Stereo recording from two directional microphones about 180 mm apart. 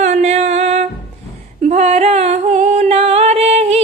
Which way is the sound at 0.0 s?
40° right (ahead or behind).